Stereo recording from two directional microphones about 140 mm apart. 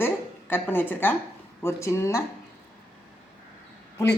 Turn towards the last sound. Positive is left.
turn(degrees=20)  # may be behind; listen again after turning